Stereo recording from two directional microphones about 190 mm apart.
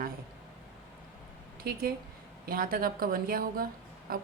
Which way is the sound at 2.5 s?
50° right (ahead or behind).